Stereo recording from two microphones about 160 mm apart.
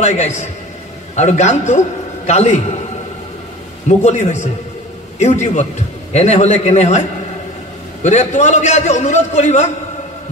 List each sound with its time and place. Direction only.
0.0 s a man's voice: 45° left (ahead or behind)
4.0 s a man's voice: 50° left (ahead or behind)